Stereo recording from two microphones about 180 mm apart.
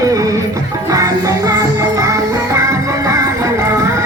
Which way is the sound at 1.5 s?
20° right (ahead or behind).